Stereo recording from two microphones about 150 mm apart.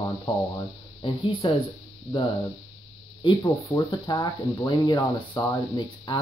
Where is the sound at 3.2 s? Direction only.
30° left (ahead or behind).